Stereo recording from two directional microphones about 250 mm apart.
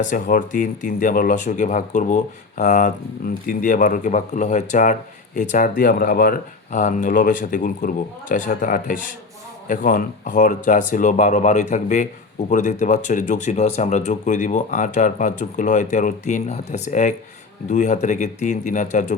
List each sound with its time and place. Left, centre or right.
0.1 s speech: left